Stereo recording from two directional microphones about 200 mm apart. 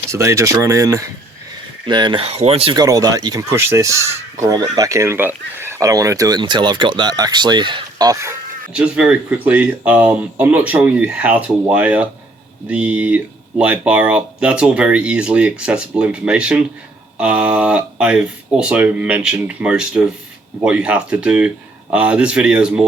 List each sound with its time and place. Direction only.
0.1 s speech: 15° right (ahead or behind)